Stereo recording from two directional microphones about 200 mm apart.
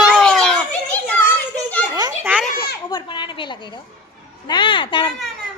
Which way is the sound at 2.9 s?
25° left (ahead or behind).